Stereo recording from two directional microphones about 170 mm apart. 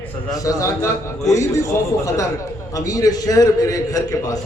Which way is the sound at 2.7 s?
20° left (ahead or behind).